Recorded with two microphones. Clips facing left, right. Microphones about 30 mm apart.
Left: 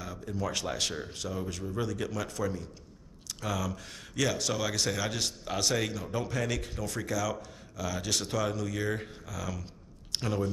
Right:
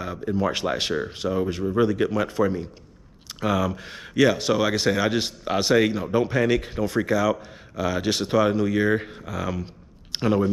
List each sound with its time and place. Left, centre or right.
0.0 s speech: right